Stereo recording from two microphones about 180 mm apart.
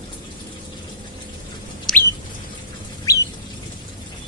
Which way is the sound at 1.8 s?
10° left (ahead or behind).